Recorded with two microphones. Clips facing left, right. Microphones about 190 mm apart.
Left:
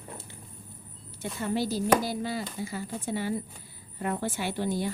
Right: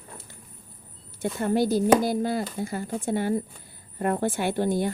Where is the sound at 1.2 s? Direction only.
50° right (ahead or behind).